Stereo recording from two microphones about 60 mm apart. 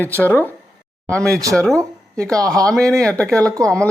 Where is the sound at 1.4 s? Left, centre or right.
Right.